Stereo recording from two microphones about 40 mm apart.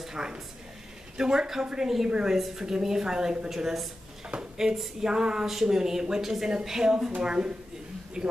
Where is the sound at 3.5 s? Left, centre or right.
Centre.